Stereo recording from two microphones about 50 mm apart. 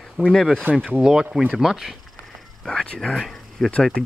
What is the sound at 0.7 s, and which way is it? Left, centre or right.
Speech, right.